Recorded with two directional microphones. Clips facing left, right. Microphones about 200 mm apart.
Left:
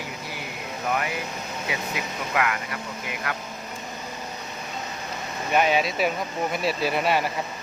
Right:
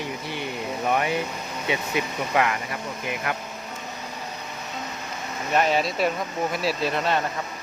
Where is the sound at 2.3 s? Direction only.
30° right (ahead or behind).